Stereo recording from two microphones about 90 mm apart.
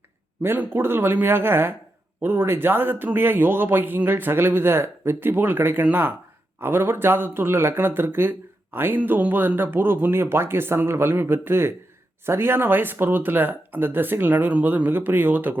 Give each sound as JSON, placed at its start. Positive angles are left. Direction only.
{"t": 0.4, "sound": "speech", "side_deg": -25}